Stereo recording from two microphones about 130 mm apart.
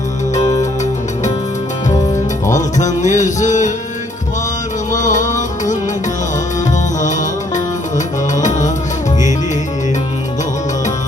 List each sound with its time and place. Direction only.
0.3 s music: 30° left (ahead or behind)
2.5 s music: 70° left (ahead or behind)
4.9 s music: 75° left (ahead or behind)
7.0 s music: 75° left (ahead or behind)